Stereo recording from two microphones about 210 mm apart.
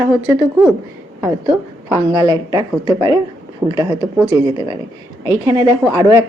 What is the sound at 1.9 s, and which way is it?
A woman's voice, 20° right (ahead or behind).